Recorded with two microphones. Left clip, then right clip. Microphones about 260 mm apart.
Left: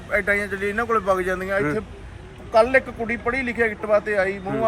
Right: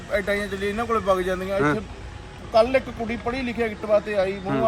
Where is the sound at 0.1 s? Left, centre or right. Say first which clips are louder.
Left 3 dB; centre.